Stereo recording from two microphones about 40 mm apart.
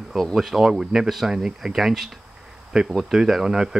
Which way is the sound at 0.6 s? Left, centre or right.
Centre.